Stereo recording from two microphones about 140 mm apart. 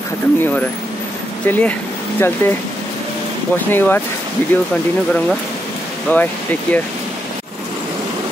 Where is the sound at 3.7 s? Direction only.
15° left (ahead or behind).